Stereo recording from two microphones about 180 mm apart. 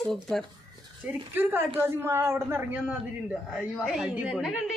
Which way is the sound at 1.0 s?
10° right (ahead or behind).